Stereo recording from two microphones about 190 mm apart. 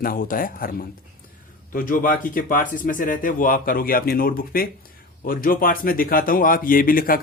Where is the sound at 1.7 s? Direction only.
45° left (ahead or behind).